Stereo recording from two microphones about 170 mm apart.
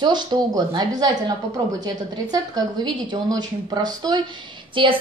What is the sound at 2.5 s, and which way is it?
A woman's voice, 25° right (ahead or behind).